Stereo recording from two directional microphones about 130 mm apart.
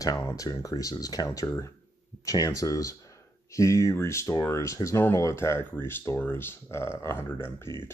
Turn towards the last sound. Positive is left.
turn(degrees=20)  # may be behind; listen again after turning